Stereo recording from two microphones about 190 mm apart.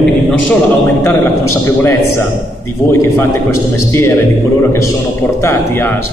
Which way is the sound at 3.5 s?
15° left (ahead or behind).